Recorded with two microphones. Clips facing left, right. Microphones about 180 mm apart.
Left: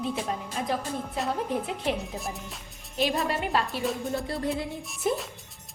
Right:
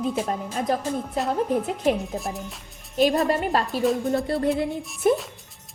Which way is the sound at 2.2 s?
Centre (ahead or behind).